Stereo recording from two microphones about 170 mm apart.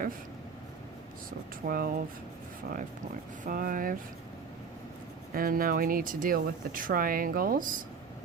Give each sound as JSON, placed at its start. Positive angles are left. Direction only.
{"t": 1.6, "sound": "speech", "side_deg": -60}
{"t": 3.4, "sound": "speech", "side_deg": -55}
{"t": 5.3, "sound": "speech", "side_deg": -60}